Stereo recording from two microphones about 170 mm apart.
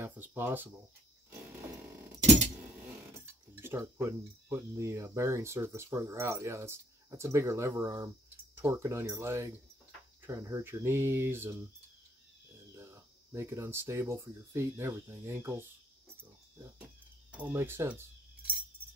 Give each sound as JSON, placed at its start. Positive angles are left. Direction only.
{"t": 0.0, "sound": "speech", "side_deg": -15}
{"t": 3.6, "sound": "speech", "side_deg": -15}
{"t": 12.7, "sound": "speech", "side_deg": -15}
{"t": 17.3, "sound": "speech", "side_deg": -10}